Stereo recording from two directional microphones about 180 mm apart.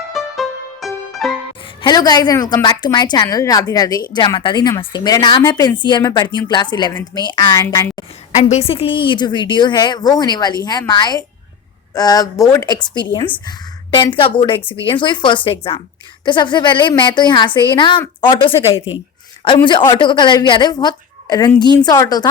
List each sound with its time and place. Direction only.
0.1 s music: centre (ahead or behind)
1.8 s a woman's voice: 20° left (ahead or behind)
8.4 s a woman's voice: 35° left (ahead or behind)